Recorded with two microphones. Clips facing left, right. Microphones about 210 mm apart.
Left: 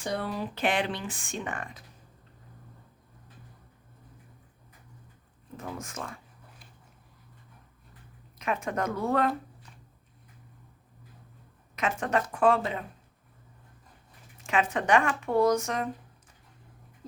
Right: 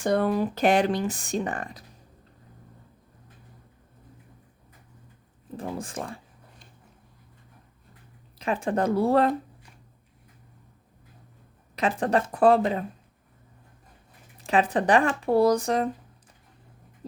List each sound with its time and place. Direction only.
0.0 s speech: 50° right (ahead or behind)
5.5 s speech: 30° right (ahead or behind)
8.4 s speech: 30° right (ahead or behind)
11.8 s speech: 35° right (ahead or behind)
14.4 s speech: 35° right (ahead or behind)